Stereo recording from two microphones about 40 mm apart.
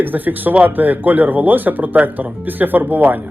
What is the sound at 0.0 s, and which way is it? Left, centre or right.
Speech, right.